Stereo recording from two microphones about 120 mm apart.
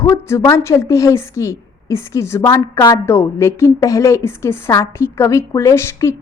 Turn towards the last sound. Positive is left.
turn(degrees=20)  # may be behind; listen again after turning